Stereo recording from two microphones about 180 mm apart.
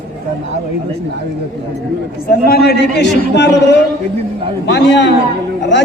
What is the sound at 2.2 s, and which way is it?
A man's voice, 60° left (ahead or behind).